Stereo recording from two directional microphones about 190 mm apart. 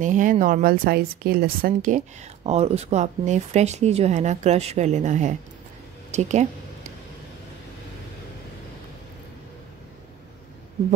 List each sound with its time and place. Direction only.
0.0 s speech: 40° right (ahead or behind)